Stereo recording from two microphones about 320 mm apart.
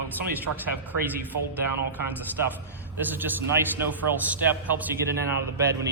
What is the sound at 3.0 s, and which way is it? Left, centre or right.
A man's voice, centre.